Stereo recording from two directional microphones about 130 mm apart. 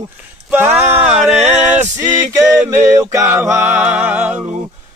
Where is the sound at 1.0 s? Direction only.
60° right (ahead or behind).